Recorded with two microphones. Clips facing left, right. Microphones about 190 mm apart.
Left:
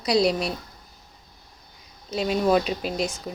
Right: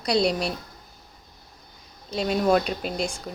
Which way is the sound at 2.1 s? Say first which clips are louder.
Even; centre (ahead or behind).